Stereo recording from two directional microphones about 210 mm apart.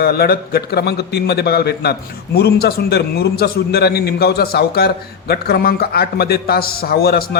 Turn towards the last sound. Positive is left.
turn(degrees=50)  # may be behind; listen again after turning